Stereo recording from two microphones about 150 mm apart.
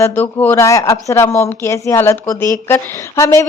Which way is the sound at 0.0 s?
15° left (ahead or behind).